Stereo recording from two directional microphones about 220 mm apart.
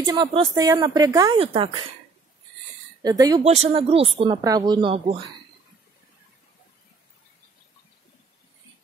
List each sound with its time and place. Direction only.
0.0 s speech: 20° right (ahead or behind)
3.0 s speech: 15° right (ahead or behind)